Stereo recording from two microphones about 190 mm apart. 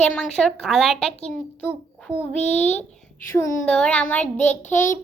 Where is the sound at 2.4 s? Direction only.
35° left (ahead or behind).